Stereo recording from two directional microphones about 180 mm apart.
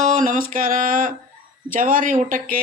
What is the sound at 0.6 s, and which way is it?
Speech, 50° right (ahead or behind).